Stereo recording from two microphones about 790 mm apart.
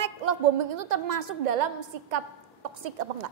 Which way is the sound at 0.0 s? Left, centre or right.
Right.